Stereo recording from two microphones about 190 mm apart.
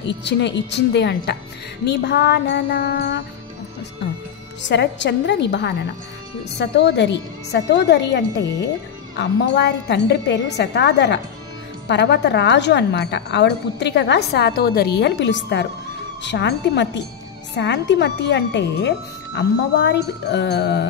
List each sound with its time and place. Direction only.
0.0 s a woman's voice: 65° left (ahead or behind)
4.6 s a woman's voice: 70° left (ahead or behind)
15.0 s a woman's voice: 70° left (ahead or behind)